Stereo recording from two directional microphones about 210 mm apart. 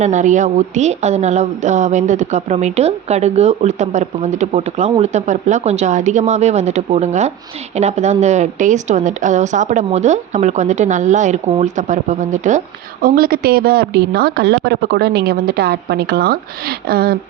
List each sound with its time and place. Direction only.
0.0 s speech: 35° right (ahead or behind)